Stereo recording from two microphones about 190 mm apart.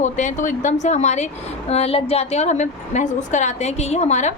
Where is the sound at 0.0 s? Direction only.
40° left (ahead or behind).